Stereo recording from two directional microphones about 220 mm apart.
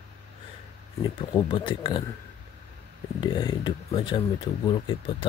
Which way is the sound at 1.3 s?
20° left (ahead or behind).